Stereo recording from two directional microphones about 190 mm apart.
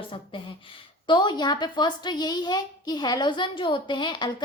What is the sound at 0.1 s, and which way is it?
A woman's voice, 25° left (ahead or behind).